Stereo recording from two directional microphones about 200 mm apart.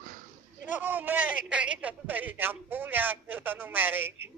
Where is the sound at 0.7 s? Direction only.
10° right (ahead or behind).